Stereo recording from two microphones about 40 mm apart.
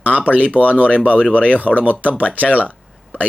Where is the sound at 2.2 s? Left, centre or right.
Left.